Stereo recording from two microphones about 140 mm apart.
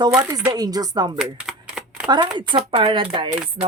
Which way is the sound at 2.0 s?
30° right (ahead or behind).